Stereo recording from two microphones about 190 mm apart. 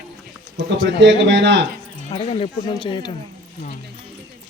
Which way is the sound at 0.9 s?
70° right (ahead or behind).